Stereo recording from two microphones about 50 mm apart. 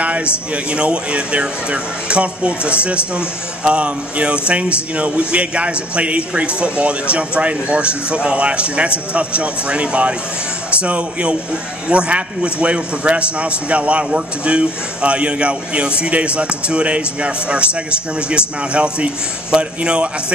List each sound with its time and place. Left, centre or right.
0.0 s a sound: right
0.7 s speech: right
18.7 s speech: right